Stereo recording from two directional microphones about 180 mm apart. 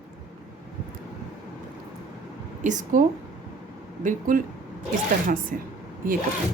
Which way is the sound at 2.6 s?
45° right (ahead or behind).